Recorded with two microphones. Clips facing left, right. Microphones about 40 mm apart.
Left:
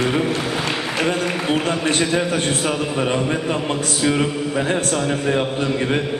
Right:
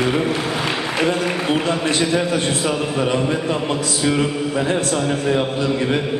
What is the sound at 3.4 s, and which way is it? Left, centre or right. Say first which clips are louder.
A man's voice: right 1 dB; centre.